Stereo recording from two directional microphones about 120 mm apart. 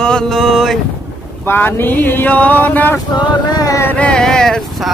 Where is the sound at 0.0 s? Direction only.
5° left (ahead or behind).